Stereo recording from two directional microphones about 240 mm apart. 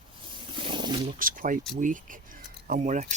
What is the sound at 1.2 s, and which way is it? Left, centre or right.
Speech, right.